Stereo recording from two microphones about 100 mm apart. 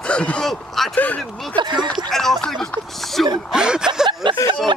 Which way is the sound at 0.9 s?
15° left (ahead or behind).